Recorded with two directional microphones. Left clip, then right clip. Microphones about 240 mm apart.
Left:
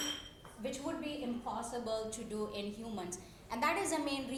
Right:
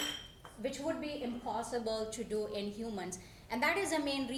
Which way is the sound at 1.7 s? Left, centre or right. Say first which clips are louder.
Right 2 dB; centre.